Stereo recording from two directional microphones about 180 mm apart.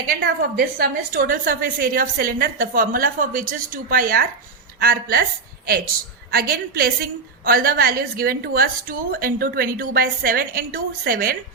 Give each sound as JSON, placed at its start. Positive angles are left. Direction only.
{"t": 0.1, "sound": "a woman's voice", "side_deg": -55}
{"t": 6.3, "sound": "a woman's voice", "side_deg": -55}